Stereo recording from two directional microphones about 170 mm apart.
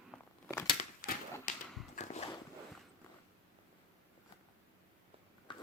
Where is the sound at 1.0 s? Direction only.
55° left (ahead or behind).